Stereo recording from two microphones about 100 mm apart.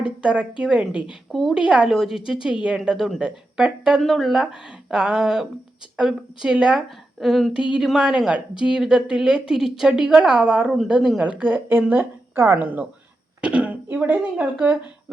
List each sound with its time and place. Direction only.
0.2 s a woman's voice: 10° right (ahead or behind)
1.3 s speech: centre (ahead or behind)
1.6 s a woman's voice: 10° right (ahead or behind)